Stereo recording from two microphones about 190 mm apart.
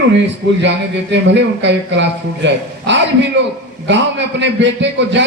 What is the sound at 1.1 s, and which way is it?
A man's voice, 70° right (ahead or behind).